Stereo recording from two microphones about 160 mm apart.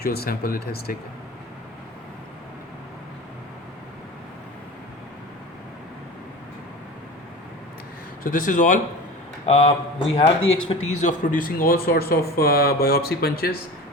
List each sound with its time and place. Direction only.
0.0 s speech: 75° left (ahead or behind)
8.2 s speech: 55° left (ahead or behind)
9.5 s speech: 40° left (ahead or behind); by 13.6 s 70° left (ahead or behind)